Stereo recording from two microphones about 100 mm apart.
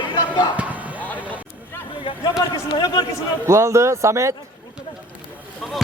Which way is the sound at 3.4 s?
30° right (ahead or behind).